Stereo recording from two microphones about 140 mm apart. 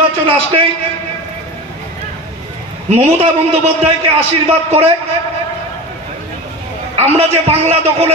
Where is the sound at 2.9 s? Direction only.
50° right (ahead or behind).